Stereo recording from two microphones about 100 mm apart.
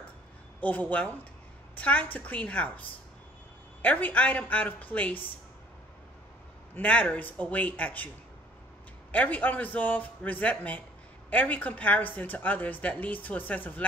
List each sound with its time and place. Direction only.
0.6 s a woman's voice: 15° left (ahead or behind)
6.7 s a woman's voice: 15° left (ahead or behind)
9.1 s a woman's voice: 15° left (ahead or behind)